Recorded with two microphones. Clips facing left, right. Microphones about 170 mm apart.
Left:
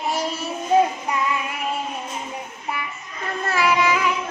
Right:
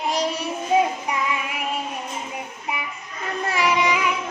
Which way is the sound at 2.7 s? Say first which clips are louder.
Left 2 dB; 15° right (ahead or behind).